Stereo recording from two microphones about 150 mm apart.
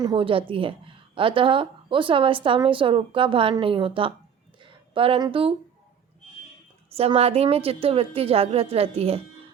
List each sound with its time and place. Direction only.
0.0 s a woman's voice: 35° right (ahead or behind)
6.9 s a woman's voice: 40° right (ahead or behind)